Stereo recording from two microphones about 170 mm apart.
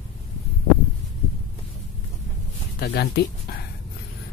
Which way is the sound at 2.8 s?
70° left (ahead or behind).